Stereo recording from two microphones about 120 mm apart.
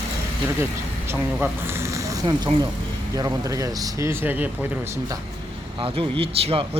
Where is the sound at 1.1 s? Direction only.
20° right (ahead or behind).